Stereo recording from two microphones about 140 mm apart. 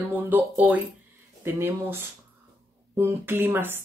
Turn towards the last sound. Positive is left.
turn(degrees=-15)  # may be behind; listen again after turning